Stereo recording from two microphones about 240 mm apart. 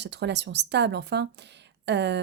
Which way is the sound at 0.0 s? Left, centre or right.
Right.